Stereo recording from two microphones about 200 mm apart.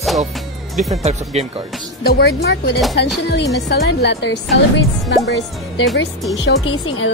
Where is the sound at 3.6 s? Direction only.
60° left (ahead or behind).